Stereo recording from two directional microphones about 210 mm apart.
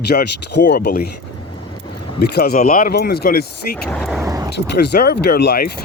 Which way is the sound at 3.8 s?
Centre (ahead or behind).